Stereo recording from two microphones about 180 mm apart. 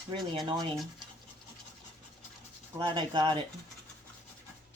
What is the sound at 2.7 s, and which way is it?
Speech, 25° right (ahead or behind).